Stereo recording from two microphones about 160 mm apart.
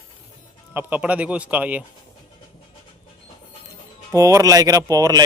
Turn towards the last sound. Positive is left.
turn(degrees=-20)  # may be behind; listen again after turning